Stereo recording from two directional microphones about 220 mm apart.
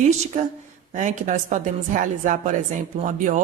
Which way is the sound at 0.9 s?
35° right (ahead or behind).